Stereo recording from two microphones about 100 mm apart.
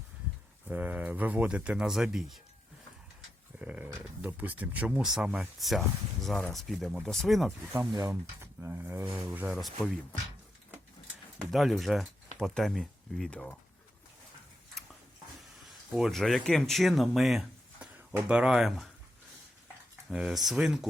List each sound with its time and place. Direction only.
0.7 s speech: 20° right (ahead or behind)
3.6 s speech: 15° right (ahead or behind)
8.1 s speech: 25° right (ahead or behind)
9.5 s speech: centre (ahead or behind)
11.3 s speech: centre (ahead or behind)
15.9 s speech: centre (ahead or behind)
17.7 s speech: 10° right (ahead or behind)
20.1 s speech: 5° right (ahead or behind)